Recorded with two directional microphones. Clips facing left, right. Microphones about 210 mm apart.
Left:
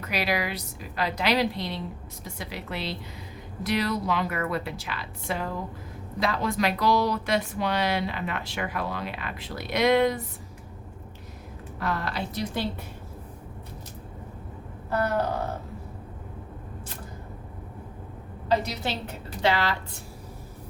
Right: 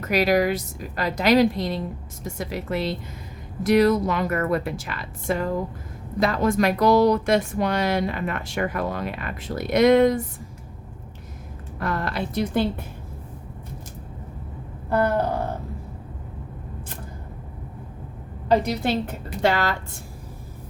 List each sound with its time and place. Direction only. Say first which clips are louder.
0.0 s speech: right 8 dB; 45° right (ahead or behind)
11.8 s speech: right 3 dB; 50° right (ahead or behind)
18.4 s speech: right 6 dB; 55° right (ahead or behind)